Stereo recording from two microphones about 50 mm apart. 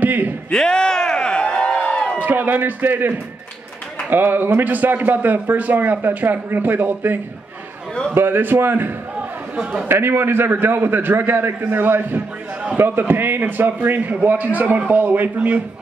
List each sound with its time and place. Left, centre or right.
0.0 s speech: right
0.5 s a sound: centre
2.2 s a man's voice: right